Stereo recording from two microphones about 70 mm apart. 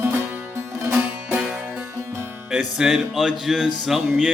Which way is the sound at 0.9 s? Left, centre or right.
Centre.